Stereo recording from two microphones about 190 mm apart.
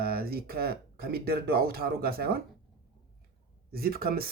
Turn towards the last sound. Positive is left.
turn(degrees=-50)  # may be behind; listen again after turning